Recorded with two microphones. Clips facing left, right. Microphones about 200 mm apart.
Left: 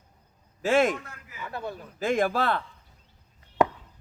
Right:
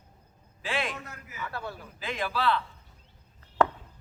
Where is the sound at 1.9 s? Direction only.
45° left (ahead or behind).